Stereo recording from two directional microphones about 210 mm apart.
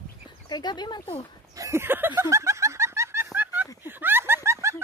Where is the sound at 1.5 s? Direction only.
15° right (ahead or behind).